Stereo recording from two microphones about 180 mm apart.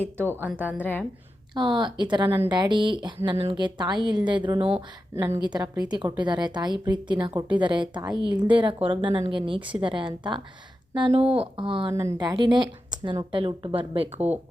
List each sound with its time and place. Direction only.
0.3 s a woman's voice: 10° right (ahead or behind)
0.8 s a woman's voice: 10° left (ahead or behind)
1.5 s speech: 25° right (ahead or behind)
2.2 s a woman's voice: 10° right (ahead or behind)
2.5 s speech: 25° right (ahead or behind)
5.1 s a woman's voice: 15° right (ahead or behind); by 14.1 s 30° right (ahead or behind)